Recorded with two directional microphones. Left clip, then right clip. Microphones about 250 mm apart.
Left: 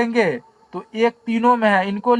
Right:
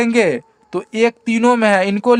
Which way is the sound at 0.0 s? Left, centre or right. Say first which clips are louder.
Right 4 dB; right.